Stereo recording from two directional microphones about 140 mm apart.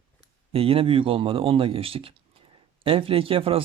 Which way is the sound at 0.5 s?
40° right (ahead or behind).